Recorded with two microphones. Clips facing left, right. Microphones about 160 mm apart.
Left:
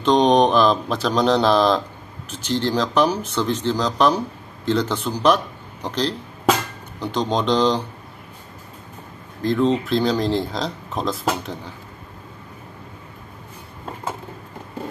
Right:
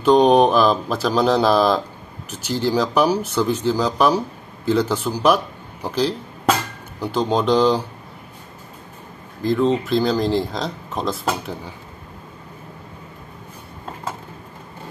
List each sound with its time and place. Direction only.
0.0 s speech: 10° right (ahead or behind)
9.4 s speech: centre (ahead or behind)